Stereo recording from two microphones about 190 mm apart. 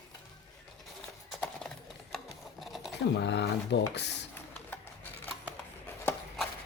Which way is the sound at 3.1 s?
65° left (ahead or behind).